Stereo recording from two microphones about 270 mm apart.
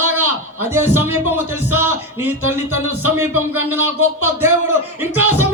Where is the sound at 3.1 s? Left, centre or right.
Centre.